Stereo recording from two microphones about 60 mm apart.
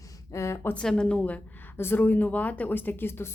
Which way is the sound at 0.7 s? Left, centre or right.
Centre.